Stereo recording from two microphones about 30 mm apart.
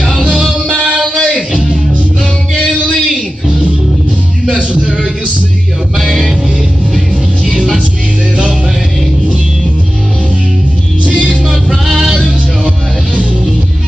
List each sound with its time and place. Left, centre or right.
1.0 s music: centre
12.6 s music: right